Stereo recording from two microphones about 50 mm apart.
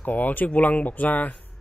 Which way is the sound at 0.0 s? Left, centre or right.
Left.